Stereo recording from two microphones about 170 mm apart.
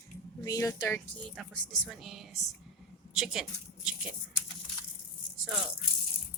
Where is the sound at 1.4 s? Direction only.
Centre (ahead or behind).